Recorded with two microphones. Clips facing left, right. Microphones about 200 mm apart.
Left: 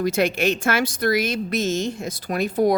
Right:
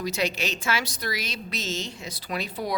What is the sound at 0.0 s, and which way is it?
A woman's voice, 55° left (ahead or behind).